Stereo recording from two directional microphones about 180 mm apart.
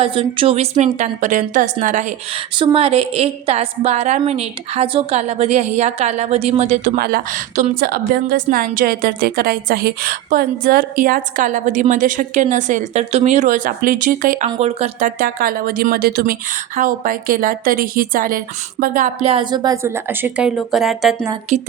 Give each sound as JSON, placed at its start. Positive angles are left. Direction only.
{"t": 0.0, "sound": "a woman's voice", "side_deg": -30}
{"t": 2.6, "sound": "a woman's voice", "side_deg": -30}
{"t": 15.2, "sound": "a woman's voice", "side_deg": -55}
{"t": 19.2, "sound": "a woman's voice", "side_deg": -30}